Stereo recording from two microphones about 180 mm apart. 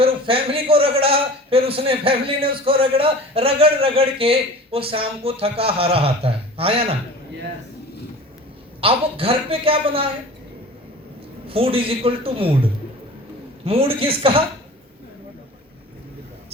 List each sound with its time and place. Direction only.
0.0 s a man's voice: 30° right (ahead or behind)
8.8 s a man's voice: 30° right (ahead or behind)
11.4 s a man's voice: 30° right (ahead or behind)
13.7 s a man's voice: 30° right (ahead or behind)